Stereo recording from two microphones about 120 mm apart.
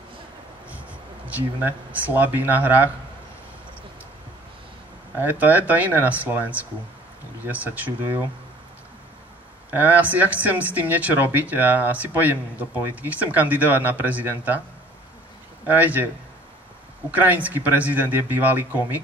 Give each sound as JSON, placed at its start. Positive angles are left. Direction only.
{"t": 1.9, "sound": "speech", "side_deg": -15}
{"t": 5.4, "sound": "speech", "side_deg": -15}
{"t": 9.7, "sound": "speech", "side_deg": -15}
{"t": 15.6, "sound": "speech", "side_deg": -15}
{"t": 17.1, "sound": "speech", "side_deg": -15}